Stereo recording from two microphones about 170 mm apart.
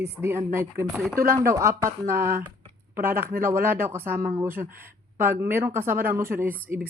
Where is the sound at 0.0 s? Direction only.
15° right (ahead or behind).